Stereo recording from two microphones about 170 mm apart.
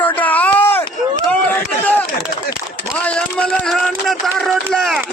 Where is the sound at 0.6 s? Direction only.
10° left (ahead or behind).